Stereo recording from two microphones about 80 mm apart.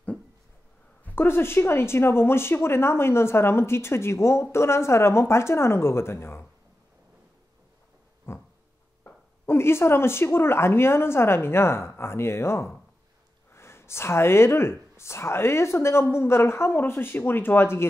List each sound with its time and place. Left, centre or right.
1.0 s speech: left
8.3 s a sound: left
9.0 s speech: left